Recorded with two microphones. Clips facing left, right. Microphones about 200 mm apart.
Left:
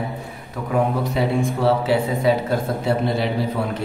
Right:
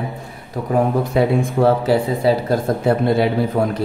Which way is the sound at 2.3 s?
35° right (ahead or behind).